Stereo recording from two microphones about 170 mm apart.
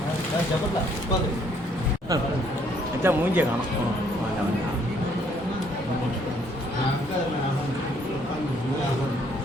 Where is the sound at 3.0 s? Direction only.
10° right (ahead or behind).